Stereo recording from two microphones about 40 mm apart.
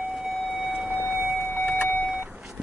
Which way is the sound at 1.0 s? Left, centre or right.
Right.